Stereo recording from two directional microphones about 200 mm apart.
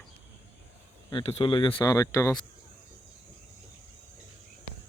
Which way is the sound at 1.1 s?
30° left (ahead or behind).